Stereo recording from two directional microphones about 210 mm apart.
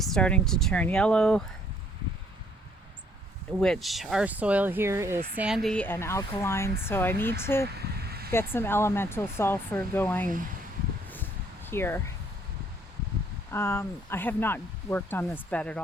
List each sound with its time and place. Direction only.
0.0 s speech: 5° left (ahead or behind)
3.6 s speech: centre (ahead or behind)
5.4 s speech: centre (ahead or behind)
7.9 s a sound: 50° right (ahead or behind)
8.3 s speech: 10° left (ahead or behind)
11.6 s speech: 10° left (ahead or behind)
13.5 s speech: 10° left (ahead or behind)